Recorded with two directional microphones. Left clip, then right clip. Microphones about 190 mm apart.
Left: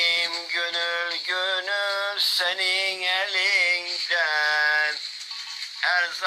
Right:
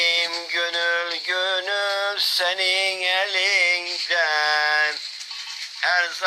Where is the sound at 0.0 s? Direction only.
40° right (ahead or behind).